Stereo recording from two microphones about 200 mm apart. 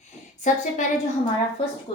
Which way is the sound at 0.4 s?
40° left (ahead or behind).